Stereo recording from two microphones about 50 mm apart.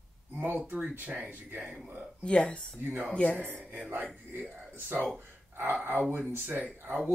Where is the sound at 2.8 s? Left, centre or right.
Right.